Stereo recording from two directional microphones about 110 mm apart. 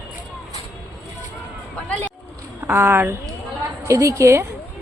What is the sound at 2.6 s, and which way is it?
Speech, 20° right (ahead or behind).